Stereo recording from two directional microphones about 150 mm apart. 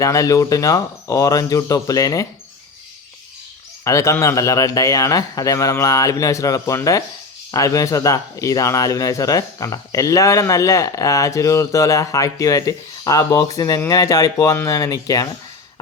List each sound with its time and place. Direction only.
0.0 s speech: 20° left (ahead or behind)
3.8 s speech: 20° left (ahead or behind)